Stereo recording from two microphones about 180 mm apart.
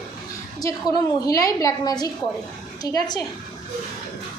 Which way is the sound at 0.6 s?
20° left (ahead or behind).